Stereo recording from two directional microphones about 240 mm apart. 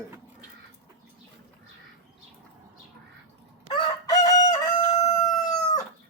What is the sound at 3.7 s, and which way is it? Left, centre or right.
Chicken, centre.